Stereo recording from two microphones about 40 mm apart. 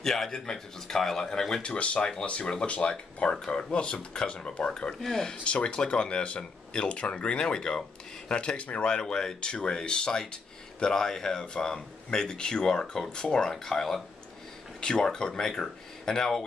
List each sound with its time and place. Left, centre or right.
0.0 s speech: centre
1.6 s speech: left
5.0 s speech: centre
5.4 s speech: left
8.5 s speech: left
8.9 s speech: centre